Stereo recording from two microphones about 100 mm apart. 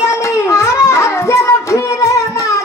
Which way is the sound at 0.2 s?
30° left (ahead or behind).